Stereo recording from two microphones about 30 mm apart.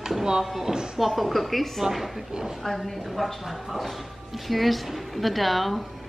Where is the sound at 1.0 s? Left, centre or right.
Centre.